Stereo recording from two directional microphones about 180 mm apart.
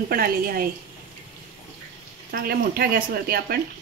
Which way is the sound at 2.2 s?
60° right (ahead or behind).